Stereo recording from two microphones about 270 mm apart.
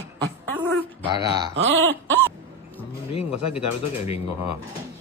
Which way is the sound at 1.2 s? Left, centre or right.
Centre.